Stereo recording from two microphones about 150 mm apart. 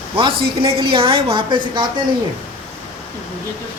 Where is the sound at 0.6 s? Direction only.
35° right (ahead or behind).